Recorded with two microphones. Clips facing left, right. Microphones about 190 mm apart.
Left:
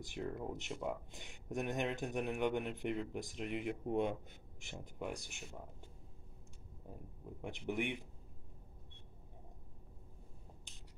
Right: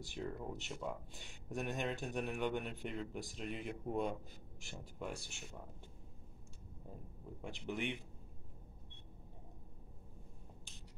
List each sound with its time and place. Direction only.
0.0 s speech: 15° left (ahead or behind)
7.4 s speech: 20° left (ahead or behind)